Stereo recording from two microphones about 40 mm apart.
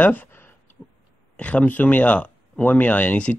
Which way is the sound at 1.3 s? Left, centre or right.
Left.